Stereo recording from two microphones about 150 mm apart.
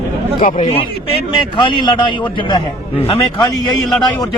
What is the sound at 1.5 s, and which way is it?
A man's voice, 30° left (ahead or behind).